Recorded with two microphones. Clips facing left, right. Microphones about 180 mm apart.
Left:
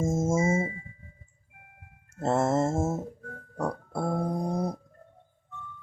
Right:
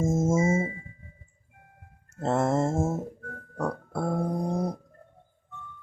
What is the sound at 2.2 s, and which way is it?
Music, 5° left (ahead or behind).